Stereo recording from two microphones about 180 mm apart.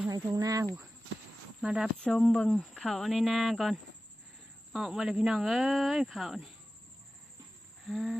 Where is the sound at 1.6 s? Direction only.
5° right (ahead or behind).